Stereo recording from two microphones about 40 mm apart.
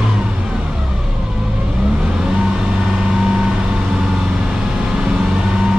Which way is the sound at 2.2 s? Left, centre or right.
Centre.